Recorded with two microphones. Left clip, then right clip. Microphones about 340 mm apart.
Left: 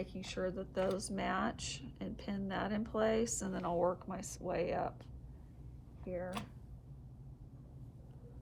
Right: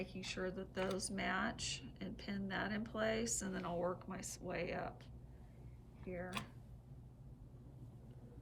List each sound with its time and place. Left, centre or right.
0.0 s speech: centre
6.1 s speech: left